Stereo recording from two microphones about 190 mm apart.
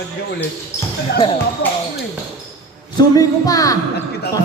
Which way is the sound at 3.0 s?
20° left (ahead or behind).